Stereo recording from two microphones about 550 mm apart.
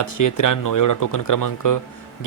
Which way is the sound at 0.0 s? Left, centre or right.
Left.